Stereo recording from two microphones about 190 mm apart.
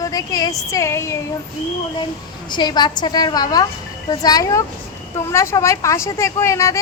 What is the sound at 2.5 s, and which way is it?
A woman's voice, 25° left (ahead or behind).